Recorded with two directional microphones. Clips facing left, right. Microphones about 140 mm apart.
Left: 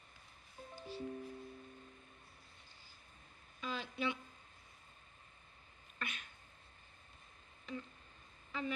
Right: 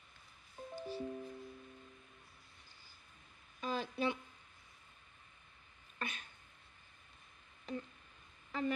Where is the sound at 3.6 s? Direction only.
40° right (ahead or behind).